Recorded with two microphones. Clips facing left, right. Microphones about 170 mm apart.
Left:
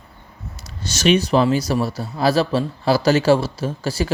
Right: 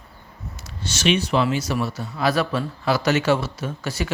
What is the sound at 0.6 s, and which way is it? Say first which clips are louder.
Speech: left 4 dB; 40° left (ahead or behind).